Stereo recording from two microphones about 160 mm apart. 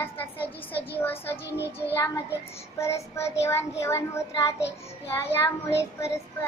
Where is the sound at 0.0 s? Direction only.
10° left (ahead or behind).